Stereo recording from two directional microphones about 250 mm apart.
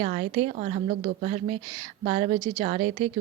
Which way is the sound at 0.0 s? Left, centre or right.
Right.